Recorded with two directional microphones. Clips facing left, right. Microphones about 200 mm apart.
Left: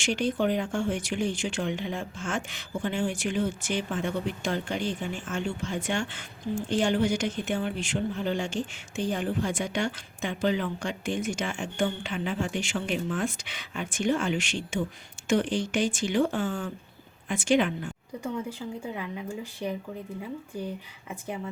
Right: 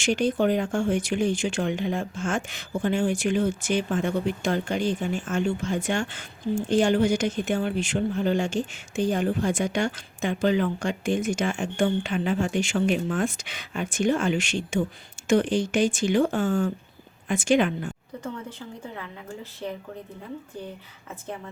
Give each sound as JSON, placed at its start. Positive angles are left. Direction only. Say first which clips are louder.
{"t": 0.0, "sound": "speech", "louder": "right 4 dB", "side_deg": -45}
{"t": 18.9, "sound": "speech", "louder": "left 3 dB", "side_deg": 15}